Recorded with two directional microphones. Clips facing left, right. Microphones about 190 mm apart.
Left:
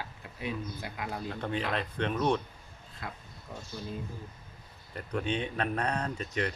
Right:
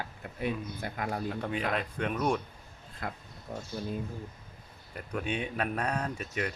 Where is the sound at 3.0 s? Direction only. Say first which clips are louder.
Right 4 dB; 55° right (ahead or behind).